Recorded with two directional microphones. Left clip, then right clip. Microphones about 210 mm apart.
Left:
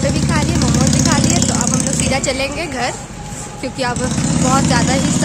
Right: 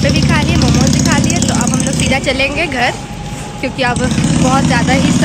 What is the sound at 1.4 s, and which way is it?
Speech, 10° left (ahead or behind).